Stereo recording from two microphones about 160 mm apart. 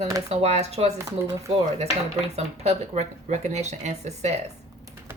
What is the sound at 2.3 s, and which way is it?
Speech, 40° right (ahead or behind).